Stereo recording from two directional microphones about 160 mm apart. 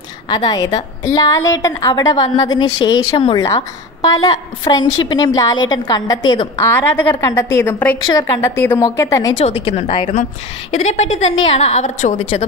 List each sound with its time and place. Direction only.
0.3 s a woman's voice: 25° left (ahead or behind)
6.6 s a woman's voice: 15° left (ahead or behind)
8.0 s a woman's voice: 25° left (ahead or behind)
9.4 s a woman's voice: 40° left (ahead or behind)
10.7 s a woman's voice: 45° left (ahead or behind)